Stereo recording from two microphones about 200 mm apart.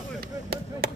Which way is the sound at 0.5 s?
50° right (ahead or behind).